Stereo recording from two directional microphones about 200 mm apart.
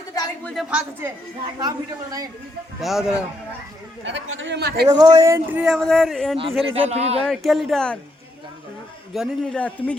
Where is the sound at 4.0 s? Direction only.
70° right (ahead or behind); by 4.8 s 55° right (ahead or behind).